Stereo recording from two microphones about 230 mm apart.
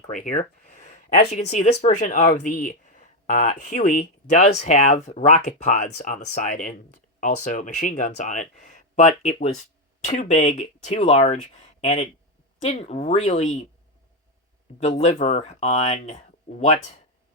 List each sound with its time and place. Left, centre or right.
0.1 s speech: left
14.8 s speech: left